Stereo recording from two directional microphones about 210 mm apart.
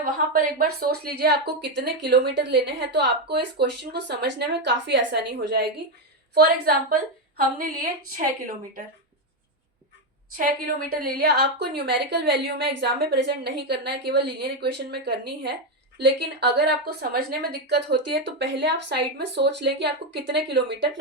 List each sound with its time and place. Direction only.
0.0 s a woman's voice: 40° right (ahead or behind)
10.3 s a woman's voice: 40° right (ahead or behind)